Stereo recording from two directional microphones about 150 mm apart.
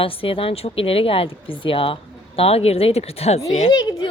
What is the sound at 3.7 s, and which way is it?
Speech, 25° left (ahead or behind).